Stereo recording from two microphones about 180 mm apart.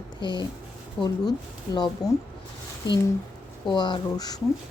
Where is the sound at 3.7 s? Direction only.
25° left (ahead or behind).